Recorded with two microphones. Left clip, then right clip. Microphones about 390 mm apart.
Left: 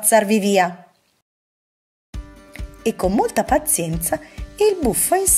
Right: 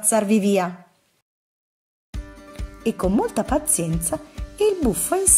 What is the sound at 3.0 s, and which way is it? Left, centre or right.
Speech, left.